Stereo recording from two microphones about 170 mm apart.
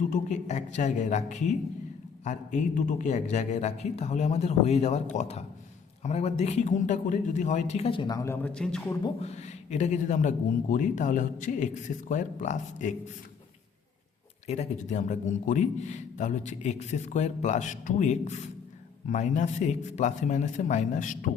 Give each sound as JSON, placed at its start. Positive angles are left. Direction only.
{"t": 0.1, "sound": "a man's voice", "side_deg": 45}
{"t": 6.0, "sound": "a man's voice", "side_deg": 40}
{"t": 8.5, "sound": "a man's voice", "side_deg": 5}
{"t": 9.2, "sound": "a man's voice", "side_deg": 40}
{"t": 14.4, "sound": "a man's voice", "side_deg": 40}